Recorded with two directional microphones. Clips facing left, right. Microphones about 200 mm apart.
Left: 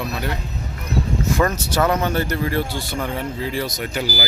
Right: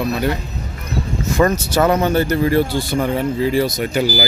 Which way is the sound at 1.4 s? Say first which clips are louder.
Right 6 dB; 5° right (ahead or behind).